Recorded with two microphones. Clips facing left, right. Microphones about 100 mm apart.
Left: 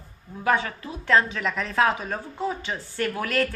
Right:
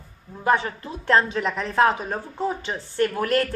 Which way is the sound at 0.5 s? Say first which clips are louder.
Right 2 dB; 25° right (ahead or behind).